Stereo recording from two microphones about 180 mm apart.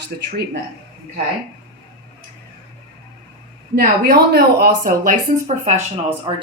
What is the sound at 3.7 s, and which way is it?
Speech, 55° right (ahead or behind).